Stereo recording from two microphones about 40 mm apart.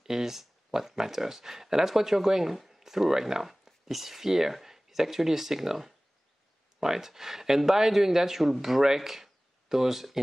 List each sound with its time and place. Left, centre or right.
0.0 s speech: centre